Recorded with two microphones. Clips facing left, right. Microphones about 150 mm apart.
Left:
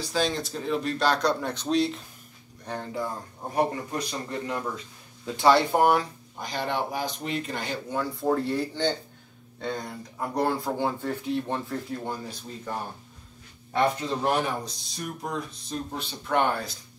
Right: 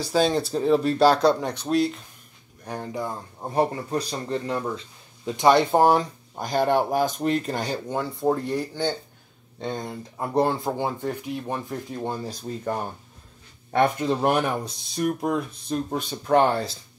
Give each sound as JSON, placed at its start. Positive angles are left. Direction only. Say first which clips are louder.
{"t": 0.0, "sound": "speech", "louder": "right 6 dB", "side_deg": -40}
{"t": 1.4, "sound": "speech", "louder": "right 2 dB", "side_deg": -10}
{"t": 3.5, "sound": "speech", "louder": "right 3 dB", "side_deg": -30}
{"t": 5.2, "sound": "speech", "louder": "right 2 dB", "side_deg": -20}
{"t": 6.3, "sound": "speech", "louder": "right 8 dB", "side_deg": -45}
{"t": 8.0, "sound": "speech", "louder": "right 1 dB", "side_deg": -20}
{"t": 13.7, "sound": "speech", "louder": "right 4 dB", "side_deg": -55}
{"t": 15.9, "sound": "speech", "louder": "right 7 dB", "side_deg": -45}